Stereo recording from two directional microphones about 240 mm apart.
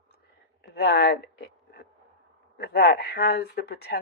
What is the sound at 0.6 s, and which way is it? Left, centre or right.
A woman's voice, left.